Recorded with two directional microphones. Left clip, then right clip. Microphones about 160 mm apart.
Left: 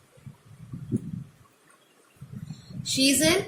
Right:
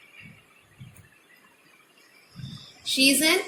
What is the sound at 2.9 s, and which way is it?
Speech, 60° left (ahead or behind).